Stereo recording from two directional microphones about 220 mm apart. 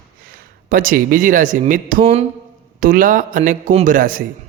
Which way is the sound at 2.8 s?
40° right (ahead or behind).